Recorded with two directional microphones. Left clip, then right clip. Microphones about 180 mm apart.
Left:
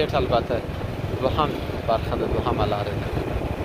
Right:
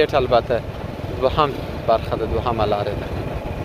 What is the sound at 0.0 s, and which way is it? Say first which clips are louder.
Speech: right 5 dB; 45° right (ahead or behind).